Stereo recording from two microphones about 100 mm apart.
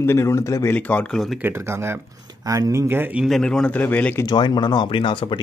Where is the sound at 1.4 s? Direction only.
25° right (ahead or behind).